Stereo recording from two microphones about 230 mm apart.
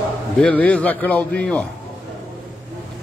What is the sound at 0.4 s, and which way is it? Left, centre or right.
A man's voice, centre.